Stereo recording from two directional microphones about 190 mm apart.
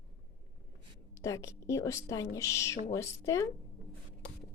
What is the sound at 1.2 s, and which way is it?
A woman's voice, 15° left (ahead or behind).